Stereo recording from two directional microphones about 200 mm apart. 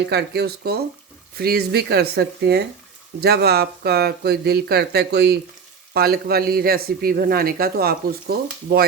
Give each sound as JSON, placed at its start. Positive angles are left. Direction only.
{"t": 0.1, "sound": "speech", "side_deg": -55}